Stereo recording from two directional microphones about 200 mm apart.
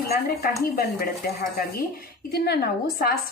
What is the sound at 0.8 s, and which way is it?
Speech, 50° left (ahead or behind).